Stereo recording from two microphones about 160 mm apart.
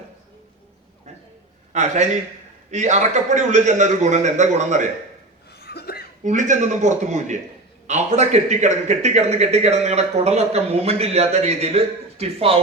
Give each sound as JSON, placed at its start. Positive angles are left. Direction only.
{"t": 1.7, "sound": "a man's voice", "side_deg": -45}
{"t": 5.5, "sound": "a sound", "side_deg": 85}
{"t": 6.2, "sound": "a man's voice", "side_deg": -50}